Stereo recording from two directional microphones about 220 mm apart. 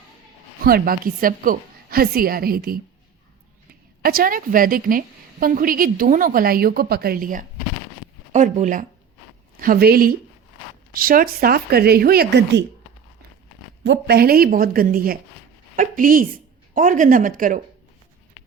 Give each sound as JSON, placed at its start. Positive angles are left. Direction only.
{"t": 0.6, "sound": "a woman's voice", "side_deg": -40}
{"t": 13.8, "sound": "a woman's voice", "side_deg": -50}